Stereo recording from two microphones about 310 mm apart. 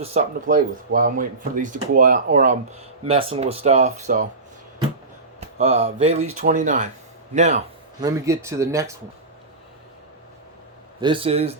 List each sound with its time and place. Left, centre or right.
0.0 s speech: right
5.4 s speech: right
8.0 s speech: centre
11.0 s speech: centre